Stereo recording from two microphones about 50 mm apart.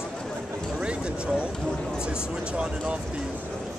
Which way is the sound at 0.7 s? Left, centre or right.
Right.